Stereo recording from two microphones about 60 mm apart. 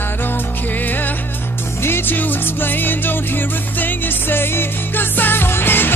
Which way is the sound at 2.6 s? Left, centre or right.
Left.